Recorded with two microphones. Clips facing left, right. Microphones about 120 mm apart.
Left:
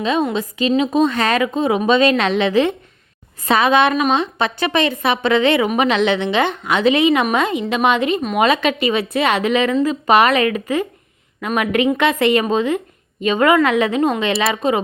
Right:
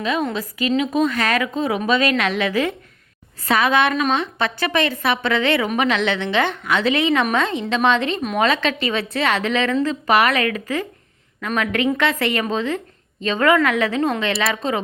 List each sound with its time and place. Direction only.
0.0 s a woman's voice: 25° left (ahead or behind)